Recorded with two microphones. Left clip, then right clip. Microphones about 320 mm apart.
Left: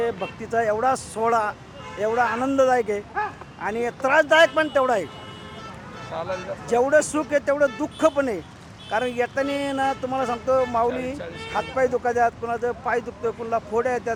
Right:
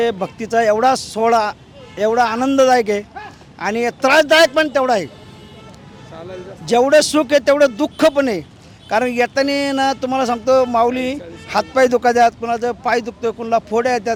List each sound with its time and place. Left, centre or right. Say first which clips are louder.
0.0 s speech: right 7 dB; right
1.1 s speech: right 7 dB; right
6.7 s speech: right 7 dB; right